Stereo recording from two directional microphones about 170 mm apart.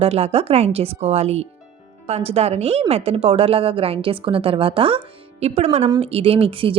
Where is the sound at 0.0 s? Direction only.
35° right (ahead or behind).